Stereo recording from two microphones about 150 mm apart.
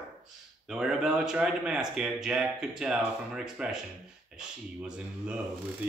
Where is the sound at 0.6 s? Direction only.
5° right (ahead or behind).